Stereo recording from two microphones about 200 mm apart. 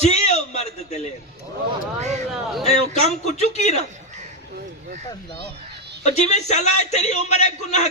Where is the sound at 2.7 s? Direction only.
35° left (ahead or behind).